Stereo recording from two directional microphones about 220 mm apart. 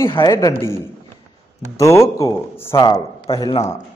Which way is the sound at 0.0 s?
15° left (ahead or behind).